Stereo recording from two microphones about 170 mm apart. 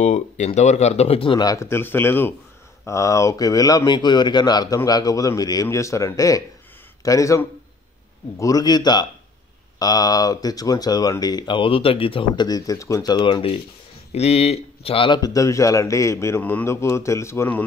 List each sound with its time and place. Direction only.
0.0 s speech: 45° left (ahead or behind); by 17.6 s 10° left (ahead or behind)